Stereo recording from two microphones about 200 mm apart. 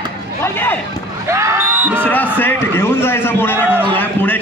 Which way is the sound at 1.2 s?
15° right (ahead or behind).